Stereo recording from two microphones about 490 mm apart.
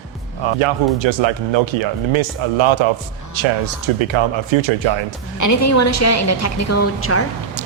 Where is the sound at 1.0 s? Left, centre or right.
Right.